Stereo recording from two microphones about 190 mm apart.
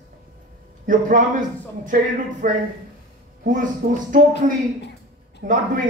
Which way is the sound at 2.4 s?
45° right (ahead or behind).